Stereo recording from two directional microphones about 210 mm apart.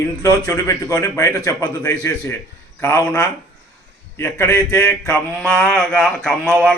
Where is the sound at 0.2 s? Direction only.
15° left (ahead or behind).